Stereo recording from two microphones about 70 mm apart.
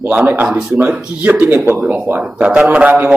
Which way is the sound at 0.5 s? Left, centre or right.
Centre.